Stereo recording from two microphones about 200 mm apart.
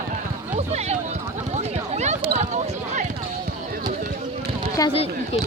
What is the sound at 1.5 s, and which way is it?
Basketball bounce, 35° right (ahead or behind).